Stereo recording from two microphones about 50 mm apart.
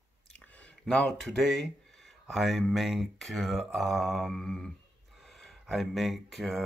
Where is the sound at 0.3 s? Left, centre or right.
Centre.